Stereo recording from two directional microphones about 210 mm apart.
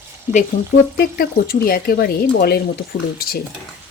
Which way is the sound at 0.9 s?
45° left (ahead or behind).